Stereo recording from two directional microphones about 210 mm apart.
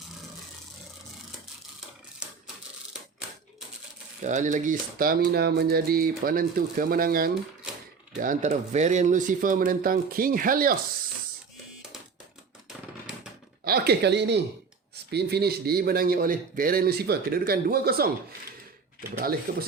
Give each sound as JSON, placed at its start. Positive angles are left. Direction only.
{"t": 4.2, "sound": "speech", "side_deg": -35}
{"t": 13.7, "sound": "speech", "side_deg": -50}
{"t": 19.2, "sound": "speech", "side_deg": -45}